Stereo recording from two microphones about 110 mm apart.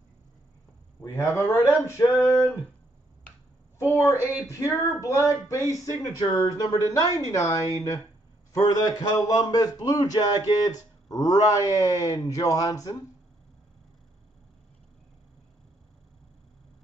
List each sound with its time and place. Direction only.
1.0 s speech: 25° left (ahead or behind)
3.7 s speech: 25° left (ahead or behind)